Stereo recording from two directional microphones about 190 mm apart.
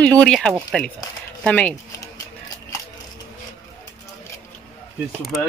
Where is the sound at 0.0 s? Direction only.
5° left (ahead or behind).